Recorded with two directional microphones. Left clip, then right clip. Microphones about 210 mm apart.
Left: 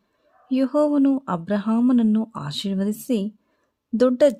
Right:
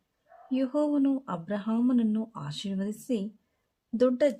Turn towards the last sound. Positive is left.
turn(degrees=40)  # may be behind; listen again after turning